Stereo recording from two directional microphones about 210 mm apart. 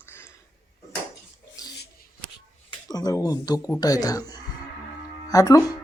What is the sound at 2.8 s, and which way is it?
Speech, 20° left (ahead or behind).